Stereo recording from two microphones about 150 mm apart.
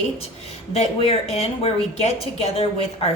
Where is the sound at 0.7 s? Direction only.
40° left (ahead or behind).